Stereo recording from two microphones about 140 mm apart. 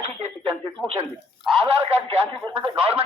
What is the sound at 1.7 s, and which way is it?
Speech, 40° right (ahead or behind).